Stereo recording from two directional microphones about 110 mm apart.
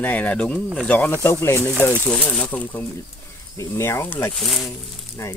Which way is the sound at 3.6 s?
25° left (ahead or behind).